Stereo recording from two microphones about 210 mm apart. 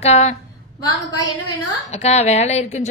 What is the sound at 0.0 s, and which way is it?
Speech, 30° left (ahead or behind).